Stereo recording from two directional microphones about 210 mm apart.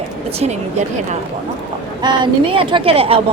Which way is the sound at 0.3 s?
30° right (ahead or behind).